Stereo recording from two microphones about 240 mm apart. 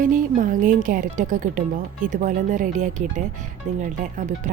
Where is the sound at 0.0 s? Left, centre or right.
Right.